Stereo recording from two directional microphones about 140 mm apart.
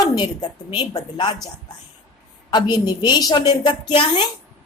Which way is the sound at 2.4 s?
30° left (ahead or behind).